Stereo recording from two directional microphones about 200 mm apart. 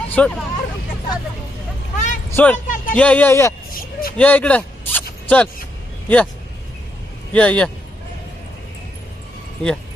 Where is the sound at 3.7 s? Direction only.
45° left (ahead or behind).